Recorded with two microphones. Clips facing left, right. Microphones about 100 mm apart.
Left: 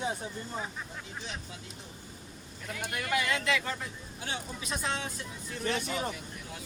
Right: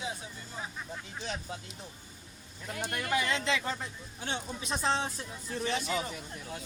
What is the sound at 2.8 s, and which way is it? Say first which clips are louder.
Speech: even; 35° right (ahead or behind).